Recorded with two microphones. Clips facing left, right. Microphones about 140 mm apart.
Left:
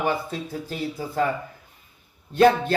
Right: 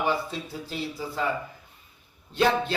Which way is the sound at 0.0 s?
50° left (ahead or behind).